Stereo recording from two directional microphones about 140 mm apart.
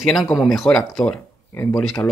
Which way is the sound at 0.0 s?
Centre (ahead or behind).